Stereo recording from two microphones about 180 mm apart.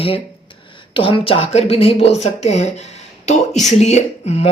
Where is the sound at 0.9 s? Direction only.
30° left (ahead or behind).